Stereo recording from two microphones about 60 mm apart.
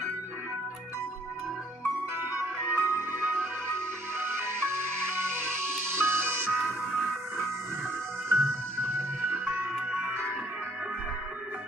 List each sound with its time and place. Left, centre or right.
2.1 s music: right
8.3 s music: right
9.8 s music: centre